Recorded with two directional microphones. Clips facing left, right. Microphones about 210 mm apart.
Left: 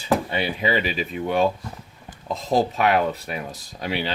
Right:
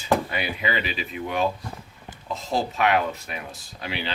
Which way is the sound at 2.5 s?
40° left (ahead or behind).